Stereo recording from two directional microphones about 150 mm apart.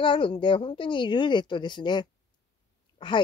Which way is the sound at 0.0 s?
35° left (ahead or behind).